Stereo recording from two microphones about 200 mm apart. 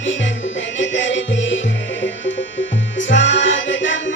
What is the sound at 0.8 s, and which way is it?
Music, 65° left (ahead or behind).